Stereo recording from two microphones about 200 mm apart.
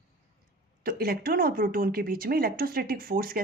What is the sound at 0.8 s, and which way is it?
Speech, 50° right (ahead or behind).